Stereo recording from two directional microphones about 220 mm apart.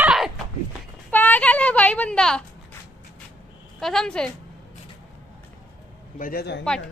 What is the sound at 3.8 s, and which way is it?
Speech, 5° left (ahead or behind).